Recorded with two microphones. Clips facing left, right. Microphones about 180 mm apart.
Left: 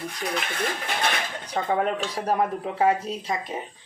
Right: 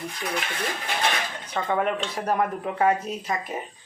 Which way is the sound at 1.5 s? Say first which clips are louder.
Left 1 dB; 35° left (ahead or behind).